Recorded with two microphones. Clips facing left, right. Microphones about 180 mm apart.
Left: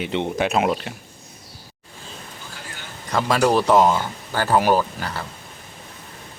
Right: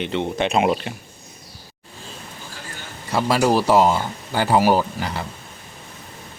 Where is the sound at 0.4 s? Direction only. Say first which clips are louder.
Right 3 dB; centre (ahead or behind).